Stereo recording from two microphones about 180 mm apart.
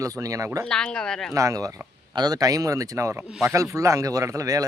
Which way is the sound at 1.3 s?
15° right (ahead or behind).